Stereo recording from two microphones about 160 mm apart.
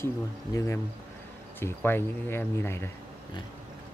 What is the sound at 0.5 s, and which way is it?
Speech, 15° left (ahead or behind).